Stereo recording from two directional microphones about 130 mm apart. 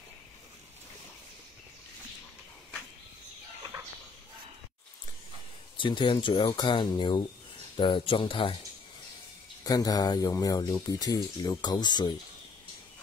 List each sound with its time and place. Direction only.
3.7 s chicken: 25° right (ahead or behind)
5.8 s speech: 40° left (ahead or behind)
9.6 s speech: 30° left (ahead or behind)